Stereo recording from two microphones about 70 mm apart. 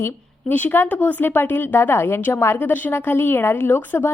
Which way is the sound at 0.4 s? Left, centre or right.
Left.